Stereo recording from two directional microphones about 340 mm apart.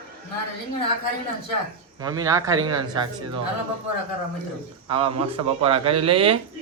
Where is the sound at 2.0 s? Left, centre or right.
Centre.